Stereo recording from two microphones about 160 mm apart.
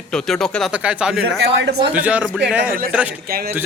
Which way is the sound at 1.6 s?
90° right.